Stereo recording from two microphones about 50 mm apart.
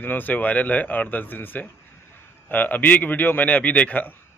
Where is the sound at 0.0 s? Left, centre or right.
Left.